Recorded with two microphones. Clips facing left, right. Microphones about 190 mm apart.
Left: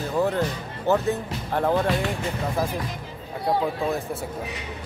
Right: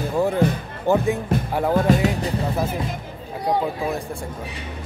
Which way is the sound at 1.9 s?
45° right (ahead or behind).